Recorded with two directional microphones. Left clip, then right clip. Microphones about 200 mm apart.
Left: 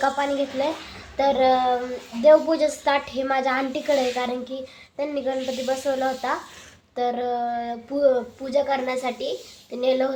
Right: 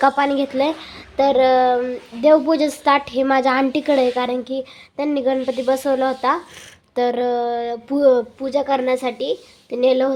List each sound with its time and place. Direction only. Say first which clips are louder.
0.0 s speech: right 6 dB; 50° right (ahead or behind)